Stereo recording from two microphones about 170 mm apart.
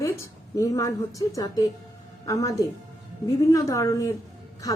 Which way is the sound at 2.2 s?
20° left (ahead or behind).